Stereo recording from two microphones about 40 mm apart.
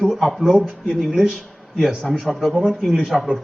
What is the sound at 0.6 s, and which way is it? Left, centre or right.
Speech, centre.